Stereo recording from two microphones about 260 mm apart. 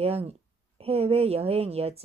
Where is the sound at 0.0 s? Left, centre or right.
Right.